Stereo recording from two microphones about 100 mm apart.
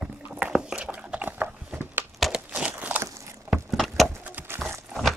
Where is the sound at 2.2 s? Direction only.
Centre (ahead or behind).